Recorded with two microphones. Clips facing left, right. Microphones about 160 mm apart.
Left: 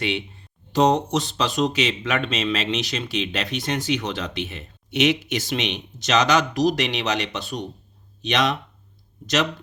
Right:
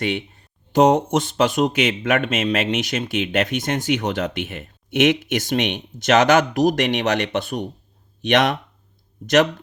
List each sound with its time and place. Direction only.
0.0 s speech: 45° right (ahead or behind)